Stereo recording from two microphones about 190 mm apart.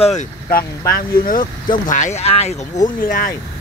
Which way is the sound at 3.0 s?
45° left (ahead or behind).